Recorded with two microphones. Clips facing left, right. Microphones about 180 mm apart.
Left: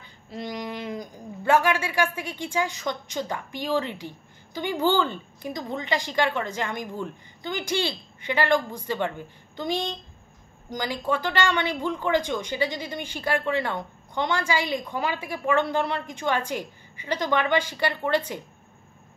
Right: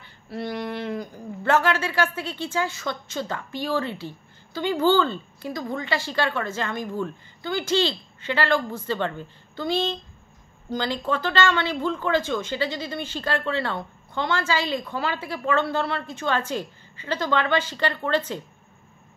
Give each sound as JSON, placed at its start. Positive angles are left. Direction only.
{"t": 0.0, "sound": "a woman's voice", "side_deg": 15}